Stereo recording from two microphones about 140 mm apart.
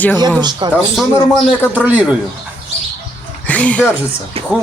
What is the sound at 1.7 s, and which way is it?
Speech, 10° right (ahead or behind).